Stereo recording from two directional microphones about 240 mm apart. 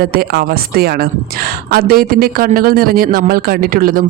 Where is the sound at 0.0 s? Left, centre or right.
Right.